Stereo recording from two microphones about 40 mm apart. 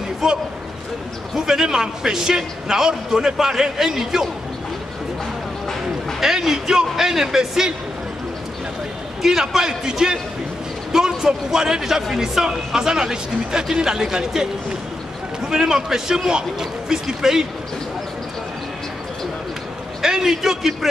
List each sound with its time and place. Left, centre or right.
0.2 s speech: centre
6.2 s speech: centre
9.2 s speech: centre
20.0 s a man's voice: centre